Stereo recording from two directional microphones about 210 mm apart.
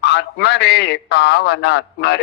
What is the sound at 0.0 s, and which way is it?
A man's voice, 55° left (ahead or behind).